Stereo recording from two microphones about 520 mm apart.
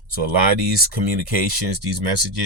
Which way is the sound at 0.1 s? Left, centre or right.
Right.